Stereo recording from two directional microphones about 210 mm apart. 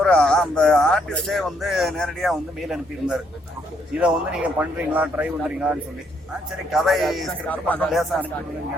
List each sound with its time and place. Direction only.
0.0 s speech: 5° left (ahead or behind)